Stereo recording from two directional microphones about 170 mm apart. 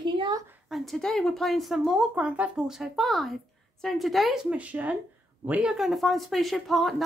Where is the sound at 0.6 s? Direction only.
Centre (ahead or behind).